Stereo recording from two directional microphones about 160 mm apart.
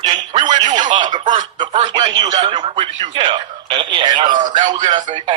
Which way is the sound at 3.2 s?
30° right (ahead or behind).